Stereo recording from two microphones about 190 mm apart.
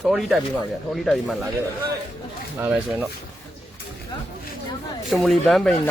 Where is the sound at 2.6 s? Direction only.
5° right (ahead or behind).